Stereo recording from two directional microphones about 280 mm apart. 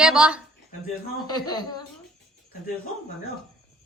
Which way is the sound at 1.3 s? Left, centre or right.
Centre.